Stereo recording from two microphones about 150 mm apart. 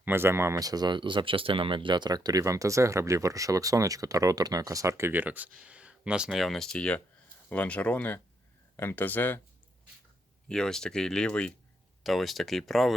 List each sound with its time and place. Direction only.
0.0 s speech: 15° right (ahead or behind); by 9.4 s 10° left (ahead or behind)
10.5 s speech: 5° left (ahead or behind)